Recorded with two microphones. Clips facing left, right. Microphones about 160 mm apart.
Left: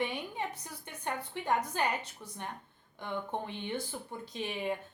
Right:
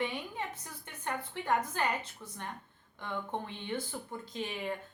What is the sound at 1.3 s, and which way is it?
A woman's voice, 15° left (ahead or behind).